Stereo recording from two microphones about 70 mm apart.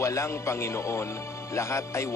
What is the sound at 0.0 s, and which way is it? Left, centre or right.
Speech, left.